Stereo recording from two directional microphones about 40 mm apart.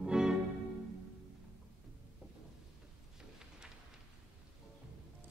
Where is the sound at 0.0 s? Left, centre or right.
Centre.